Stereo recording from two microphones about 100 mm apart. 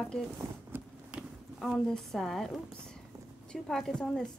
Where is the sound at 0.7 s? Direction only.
25° right (ahead or behind).